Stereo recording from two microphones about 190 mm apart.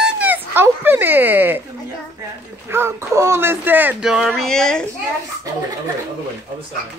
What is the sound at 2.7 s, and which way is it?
Speech, 15° right (ahead or behind).